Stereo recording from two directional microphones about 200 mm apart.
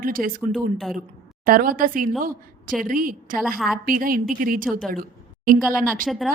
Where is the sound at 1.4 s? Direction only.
45° right (ahead or behind).